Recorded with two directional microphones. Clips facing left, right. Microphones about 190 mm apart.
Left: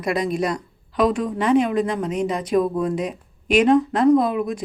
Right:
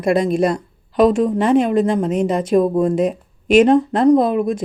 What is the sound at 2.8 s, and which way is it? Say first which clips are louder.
Speech: right 7 dB; 50° right (ahead or behind).